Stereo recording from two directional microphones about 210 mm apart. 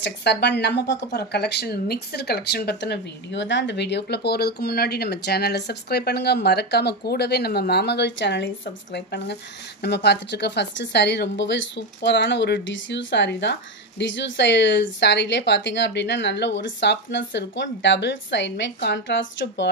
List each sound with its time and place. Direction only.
0.0 s speech: 55° left (ahead or behind)